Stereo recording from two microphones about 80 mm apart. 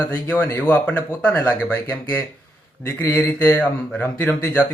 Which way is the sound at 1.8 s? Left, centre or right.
Left.